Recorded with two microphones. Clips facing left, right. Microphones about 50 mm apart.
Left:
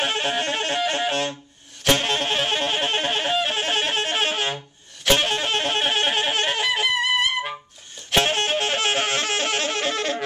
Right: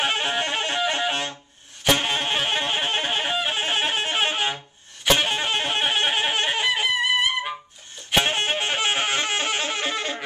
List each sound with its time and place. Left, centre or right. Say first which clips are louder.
0.0 s saxophone: even; centre
1.9 s music: left 1 dB; centre
5.0 s wind instrument: left 1 dB; centre
8.1 s saxophone: left 1 dB; centre